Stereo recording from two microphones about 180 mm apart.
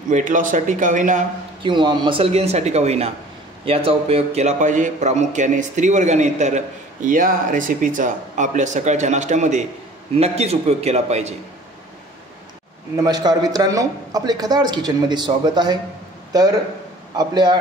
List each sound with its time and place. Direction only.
0.1 s a man's voice: 45° right (ahead or behind)
1.6 s a man's voice: 25° right (ahead or behind)
12.9 s a man's voice: 20° right (ahead or behind)